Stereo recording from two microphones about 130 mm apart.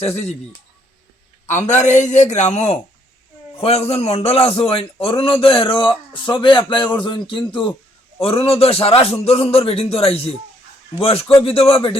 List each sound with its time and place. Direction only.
0.0 s speech: 55° left (ahead or behind)
1.5 s a man's voice: 65° left (ahead or behind); by 11.9 s 45° left (ahead or behind)